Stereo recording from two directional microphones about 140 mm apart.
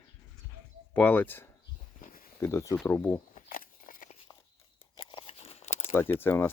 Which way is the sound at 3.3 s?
80° left.